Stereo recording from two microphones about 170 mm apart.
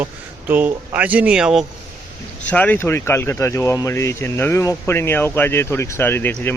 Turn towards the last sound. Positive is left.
turn(degrees=10)  # may be behind; listen again after turning